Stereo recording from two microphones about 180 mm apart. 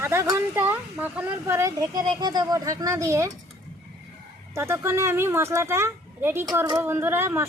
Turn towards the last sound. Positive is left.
turn(degrees=-15)  # may be behind; listen again after turning